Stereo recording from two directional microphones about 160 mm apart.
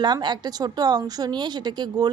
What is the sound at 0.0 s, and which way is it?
Speech, 25° right (ahead or behind).